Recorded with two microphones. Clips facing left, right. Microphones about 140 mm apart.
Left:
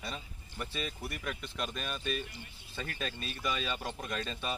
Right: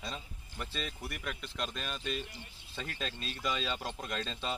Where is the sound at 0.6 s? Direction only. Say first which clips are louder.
Left 2 dB; 10° left (ahead or behind).